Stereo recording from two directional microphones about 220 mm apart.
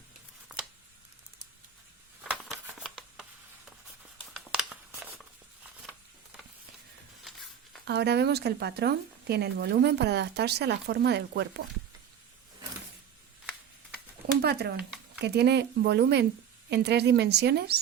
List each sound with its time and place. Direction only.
2.3 s a sound: centre (ahead or behind)
4.4 s crumpling: centre (ahead or behind)
7.9 s speech: 50° right (ahead or behind)
14.4 s speech: 45° right (ahead or behind)